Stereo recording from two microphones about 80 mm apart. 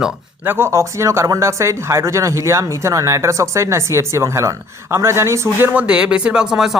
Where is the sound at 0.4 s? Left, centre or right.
Right.